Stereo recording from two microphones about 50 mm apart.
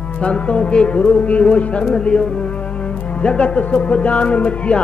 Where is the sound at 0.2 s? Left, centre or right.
Left.